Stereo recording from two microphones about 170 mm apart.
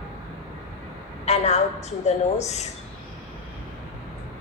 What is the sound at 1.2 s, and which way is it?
A woman's voice, 40° left (ahead or behind).